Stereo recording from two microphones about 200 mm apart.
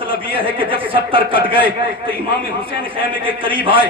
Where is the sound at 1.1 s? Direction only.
25° right (ahead or behind).